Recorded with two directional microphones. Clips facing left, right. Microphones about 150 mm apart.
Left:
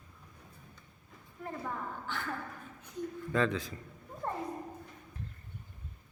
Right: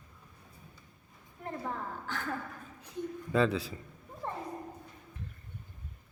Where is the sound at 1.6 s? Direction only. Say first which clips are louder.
Right 1 dB; 40° right (ahead or behind).